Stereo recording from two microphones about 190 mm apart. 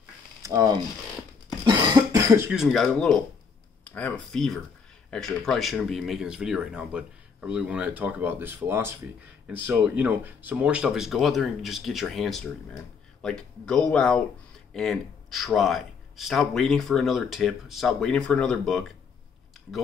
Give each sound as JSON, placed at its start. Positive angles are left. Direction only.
{"t": 0.4, "sound": "speech", "side_deg": -15}
{"t": 1.6, "sound": "cough", "side_deg": -25}
{"t": 2.5, "sound": "speech", "side_deg": 0}